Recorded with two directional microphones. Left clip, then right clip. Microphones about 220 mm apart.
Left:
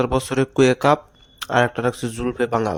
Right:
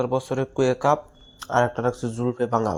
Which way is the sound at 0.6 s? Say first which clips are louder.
Left 3 dB; 25° left (ahead or behind).